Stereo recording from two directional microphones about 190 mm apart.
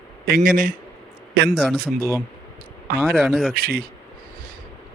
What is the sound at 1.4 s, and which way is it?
Speech, 5° left (ahead or behind).